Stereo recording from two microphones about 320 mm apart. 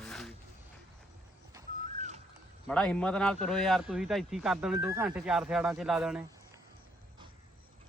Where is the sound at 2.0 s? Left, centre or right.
Right.